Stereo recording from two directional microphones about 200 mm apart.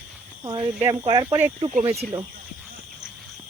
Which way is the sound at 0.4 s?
15° right (ahead or behind).